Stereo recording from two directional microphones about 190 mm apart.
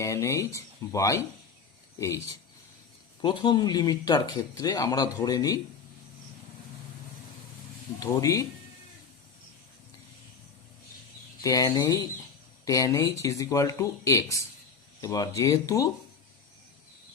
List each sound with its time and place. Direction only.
0.0 s speech: 15° left (ahead or behind)
7.9 s speech: 20° left (ahead or behind)
11.4 s speech: 20° left (ahead or behind)